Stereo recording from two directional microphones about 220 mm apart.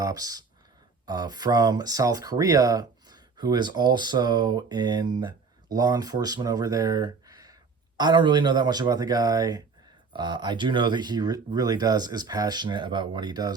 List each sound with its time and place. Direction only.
0.0 s speech: 15° right (ahead or behind)